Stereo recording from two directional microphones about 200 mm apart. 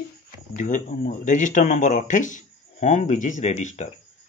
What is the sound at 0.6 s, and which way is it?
A man's voice, 40° left (ahead or behind).